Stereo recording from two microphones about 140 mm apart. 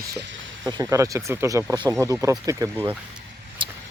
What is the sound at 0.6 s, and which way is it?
Speech, 25° right (ahead or behind).